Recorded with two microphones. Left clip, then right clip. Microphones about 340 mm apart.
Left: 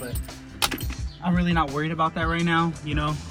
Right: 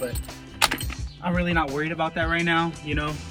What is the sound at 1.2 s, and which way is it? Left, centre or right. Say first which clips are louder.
Speech: even; centre.